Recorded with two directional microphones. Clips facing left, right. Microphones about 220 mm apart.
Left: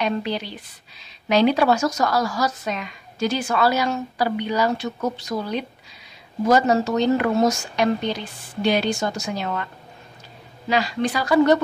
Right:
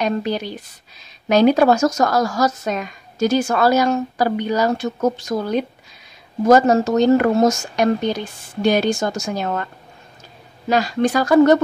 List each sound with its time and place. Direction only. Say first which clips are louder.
0.0 s speech: right 3 dB; 45° right (ahead or behind)
10.7 s speech: right 5 dB; 45° right (ahead or behind)